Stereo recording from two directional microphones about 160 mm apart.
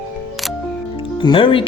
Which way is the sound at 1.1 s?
30° left (ahead or behind).